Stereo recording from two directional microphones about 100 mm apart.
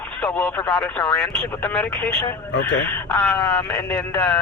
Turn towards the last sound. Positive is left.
turn(degrees=15)  # may be behind; listen again after turning